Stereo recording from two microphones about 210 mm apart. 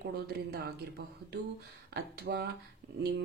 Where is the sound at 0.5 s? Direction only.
50° right (ahead or behind).